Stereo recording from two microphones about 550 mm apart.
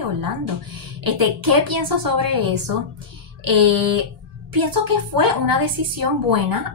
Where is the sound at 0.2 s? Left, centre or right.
Right.